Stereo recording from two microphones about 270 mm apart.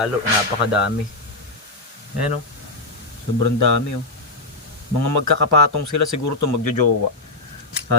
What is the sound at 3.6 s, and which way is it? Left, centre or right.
Speech, left.